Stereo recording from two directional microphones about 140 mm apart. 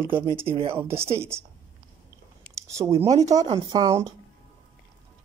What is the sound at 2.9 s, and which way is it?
Speech, 45° right (ahead or behind).